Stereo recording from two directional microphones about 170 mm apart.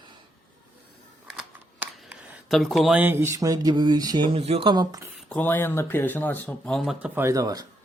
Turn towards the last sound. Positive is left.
turn(degrees=-20)  # may be behind; listen again after turning